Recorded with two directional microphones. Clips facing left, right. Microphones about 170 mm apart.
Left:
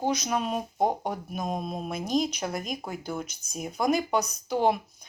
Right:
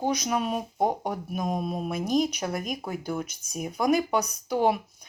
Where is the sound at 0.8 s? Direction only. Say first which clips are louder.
Even; 10° left (ahead or behind).